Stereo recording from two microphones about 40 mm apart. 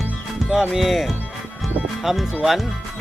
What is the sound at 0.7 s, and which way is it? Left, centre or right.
Speech, centre.